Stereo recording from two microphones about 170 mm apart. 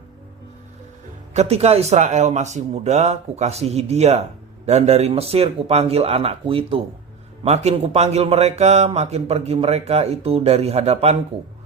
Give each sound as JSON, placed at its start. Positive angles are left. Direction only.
{"t": 1.3, "sound": "a man's voice", "side_deg": -40}